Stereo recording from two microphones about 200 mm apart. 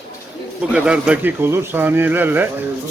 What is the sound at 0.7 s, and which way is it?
Speech, 5° right (ahead or behind).